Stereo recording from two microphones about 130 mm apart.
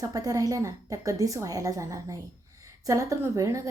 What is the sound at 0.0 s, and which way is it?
A woman's voice, 30° right (ahead or behind).